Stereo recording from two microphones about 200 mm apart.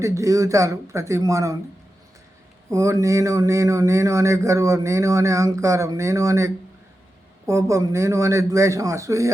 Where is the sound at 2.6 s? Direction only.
15° right (ahead or behind).